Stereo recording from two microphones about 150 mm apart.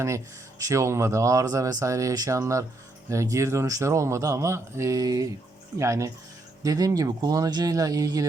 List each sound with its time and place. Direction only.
0.6 s a man's voice: 20° right (ahead or behind)